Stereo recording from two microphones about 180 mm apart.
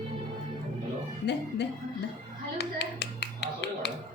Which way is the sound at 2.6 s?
70° left (ahead or behind).